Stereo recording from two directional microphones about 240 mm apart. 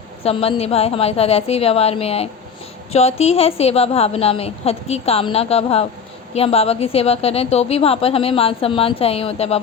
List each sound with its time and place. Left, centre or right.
0.2 s a woman's voice: left